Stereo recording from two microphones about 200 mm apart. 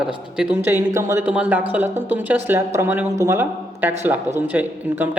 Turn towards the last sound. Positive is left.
turn(degrees=-10)  # may be behind; listen again after turning